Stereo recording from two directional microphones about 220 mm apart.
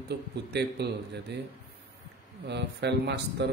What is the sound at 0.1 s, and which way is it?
A man's voice, 50° right (ahead or behind).